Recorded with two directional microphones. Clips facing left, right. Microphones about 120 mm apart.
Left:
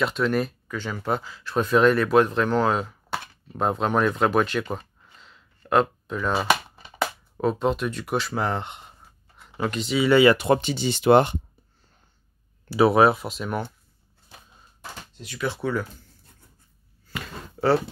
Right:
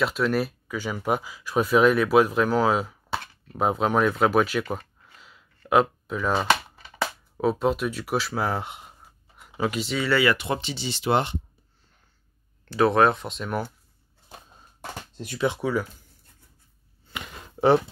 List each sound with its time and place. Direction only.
0.0 s speech: centre (ahead or behind)
4.7 s a sound: 5° right (ahead or behind)
5.7 s speech: 5° right (ahead or behind)
6.3 s speech: 10° left (ahead or behind)
7.3 s speech: 5° right (ahead or behind)
10.0 s speech: 20° left (ahead or behind)
10.3 s speech: 45° left (ahead or behind)
12.6 s speech: 10° left (ahead or behind)
15.1 s speech: 40° right (ahead or behind)
15.4 s speech: 15° right (ahead or behind)
17.0 s a sound: 20° right (ahead or behind)